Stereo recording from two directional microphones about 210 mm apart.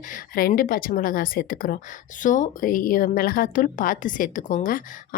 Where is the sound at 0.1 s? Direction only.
40° left (ahead or behind).